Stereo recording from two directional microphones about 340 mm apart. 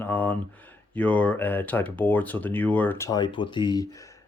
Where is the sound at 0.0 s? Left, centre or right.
Centre.